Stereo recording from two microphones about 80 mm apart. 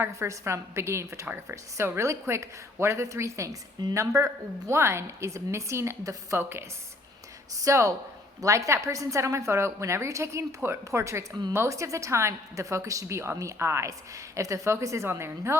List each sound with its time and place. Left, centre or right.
0.0 s a woman's voice: right
6.3 s a woman's voice: right